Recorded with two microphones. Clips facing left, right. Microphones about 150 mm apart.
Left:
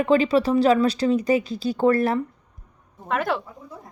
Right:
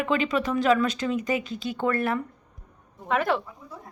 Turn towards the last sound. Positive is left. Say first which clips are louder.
# even
turn(degrees=0)  # may be behind; listen again after turning